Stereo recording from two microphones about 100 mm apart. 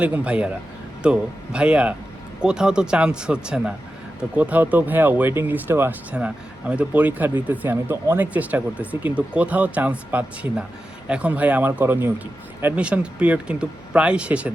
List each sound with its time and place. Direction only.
0.0 s speech: 10° right (ahead or behind)